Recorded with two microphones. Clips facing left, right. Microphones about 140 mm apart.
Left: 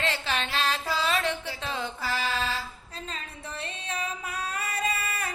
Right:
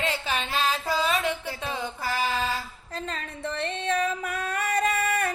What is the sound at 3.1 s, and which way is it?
Music, 65° right (ahead or behind).